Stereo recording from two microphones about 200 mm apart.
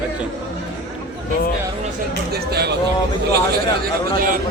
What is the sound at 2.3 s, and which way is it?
Speech, 55° right (ahead or behind).